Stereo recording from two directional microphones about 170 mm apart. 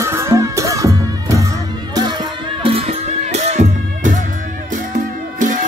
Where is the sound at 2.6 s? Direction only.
35° right (ahead or behind); by 5.6 s 50° right (ahead or behind).